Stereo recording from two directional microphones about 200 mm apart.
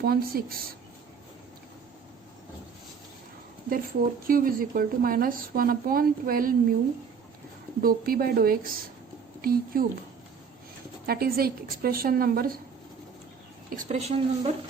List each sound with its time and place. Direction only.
0.0 s speech: 50° right (ahead or behind)
4.3 s speech: 45° right (ahead or behind)
7.8 s speech: 45° right (ahead or behind)
11.0 s speech: 50° right (ahead or behind)
13.7 s a woman's voice: 40° right (ahead or behind)